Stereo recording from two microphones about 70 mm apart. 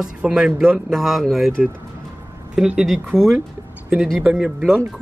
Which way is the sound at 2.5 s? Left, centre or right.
Centre.